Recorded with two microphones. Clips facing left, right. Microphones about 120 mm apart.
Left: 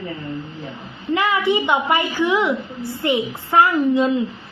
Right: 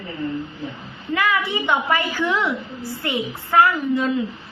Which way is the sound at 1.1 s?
20° left (ahead or behind).